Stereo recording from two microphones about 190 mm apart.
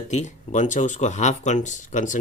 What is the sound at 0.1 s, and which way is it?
Speech, 40° left (ahead or behind).